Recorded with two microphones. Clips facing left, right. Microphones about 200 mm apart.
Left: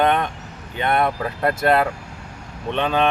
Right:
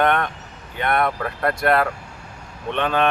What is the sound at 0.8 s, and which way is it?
Speech, 25° left (ahead or behind).